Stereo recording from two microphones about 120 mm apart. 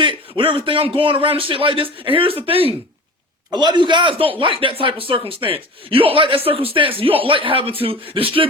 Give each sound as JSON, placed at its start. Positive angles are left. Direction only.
{"t": 0.0, "sound": "a man's voice", "side_deg": -45}
{"t": 3.5, "sound": "a man's voice", "side_deg": -35}